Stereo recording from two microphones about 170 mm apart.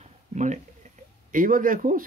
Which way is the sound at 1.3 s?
55° right (ahead or behind).